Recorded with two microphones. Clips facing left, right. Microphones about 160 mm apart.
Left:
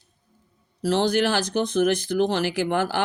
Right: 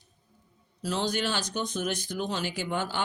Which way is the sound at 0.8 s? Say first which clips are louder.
Left 9 dB; 75° left (ahead or behind).